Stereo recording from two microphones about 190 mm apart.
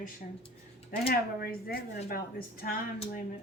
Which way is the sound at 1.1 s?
50° left (ahead or behind).